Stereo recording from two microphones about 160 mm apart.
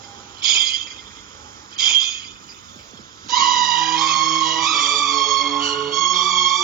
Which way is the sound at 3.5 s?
Centre (ahead or behind).